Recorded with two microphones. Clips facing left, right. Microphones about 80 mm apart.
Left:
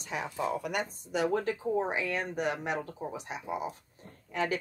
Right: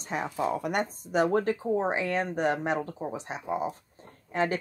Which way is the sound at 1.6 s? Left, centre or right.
Right.